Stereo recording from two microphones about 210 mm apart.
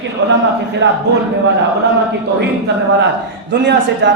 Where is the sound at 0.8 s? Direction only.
60° right (ahead or behind).